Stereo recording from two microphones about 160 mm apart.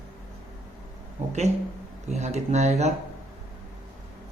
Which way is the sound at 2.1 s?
45° right (ahead or behind).